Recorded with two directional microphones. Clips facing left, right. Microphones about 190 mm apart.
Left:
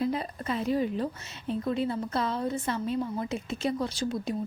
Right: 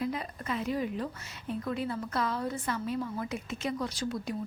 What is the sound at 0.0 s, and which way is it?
A woman's voice, 30° left (ahead or behind).